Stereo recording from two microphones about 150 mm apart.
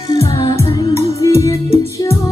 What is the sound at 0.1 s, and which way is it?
Music, 25° left (ahead or behind).